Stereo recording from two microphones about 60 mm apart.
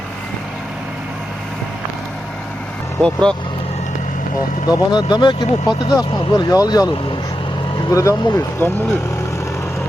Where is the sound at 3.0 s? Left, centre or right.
Centre.